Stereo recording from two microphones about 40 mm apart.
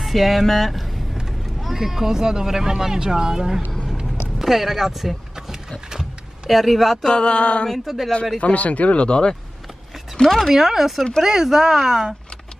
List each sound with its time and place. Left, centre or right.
0.0 s speech: centre
5.9 s vehicle: centre
6.5 s speech: centre
7.1 s male singing: left
7.8 s speech: centre
8.4 s speech: left
10.2 s speech: centre
10.5 s speech: centre